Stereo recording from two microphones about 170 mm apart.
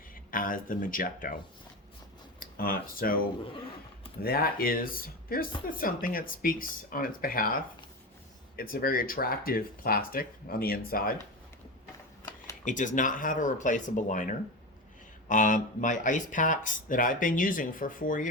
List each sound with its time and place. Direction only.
0.3 s speech: 55° left (ahead or behind)
2.4 s speech: 55° left (ahead or behind)
12.6 s speech: 50° left (ahead or behind)